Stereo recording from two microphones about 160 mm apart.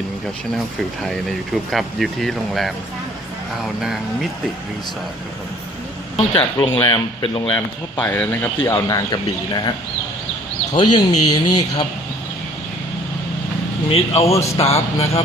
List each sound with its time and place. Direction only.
1.7 s speech: centre (ahead or behind)
6.1 s speech: 35° left (ahead or behind)
7.5 s speech: 5° left (ahead or behind); by 9.7 s 25° left (ahead or behind)
10.7 s speech: 25° left (ahead or behind)
13.8 s speech: 40° left (ahead or behind)